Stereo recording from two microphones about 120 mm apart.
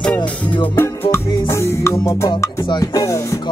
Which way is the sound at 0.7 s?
20° left (ahead or behind).